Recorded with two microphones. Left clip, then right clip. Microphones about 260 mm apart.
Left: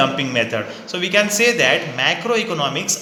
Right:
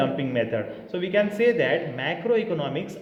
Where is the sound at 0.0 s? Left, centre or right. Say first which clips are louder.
Left 7 dB; centre.